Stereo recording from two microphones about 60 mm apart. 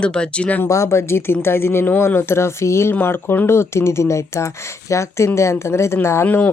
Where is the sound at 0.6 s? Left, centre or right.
Left.